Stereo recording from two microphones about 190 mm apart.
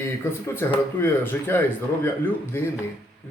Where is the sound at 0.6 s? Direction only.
10° left (ahead or behind).